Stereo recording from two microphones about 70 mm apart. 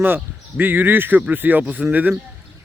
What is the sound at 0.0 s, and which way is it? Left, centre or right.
Speech, right.